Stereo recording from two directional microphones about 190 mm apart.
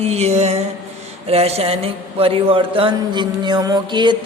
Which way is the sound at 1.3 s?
30° right (ahead or behind).